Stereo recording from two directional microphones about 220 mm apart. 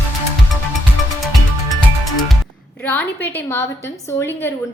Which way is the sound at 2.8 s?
10° left (ahead or behind).